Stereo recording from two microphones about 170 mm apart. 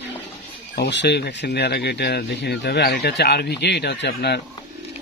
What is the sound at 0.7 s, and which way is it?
Speech, 85° left.